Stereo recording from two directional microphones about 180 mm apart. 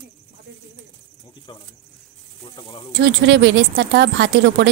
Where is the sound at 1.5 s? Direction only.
25° left (ahead or behind).